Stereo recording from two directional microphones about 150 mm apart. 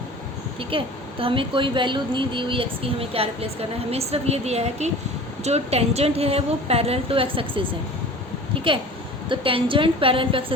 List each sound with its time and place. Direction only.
0.7 s a woman's voice: 35° right (ahead or behind)
8.5 s a sound: 35° right (ahead or behind)
9.3 s a woman's voice: 35° right (ahead or behind)